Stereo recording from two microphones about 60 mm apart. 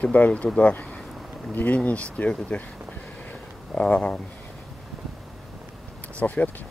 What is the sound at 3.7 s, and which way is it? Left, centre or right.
Speech, left.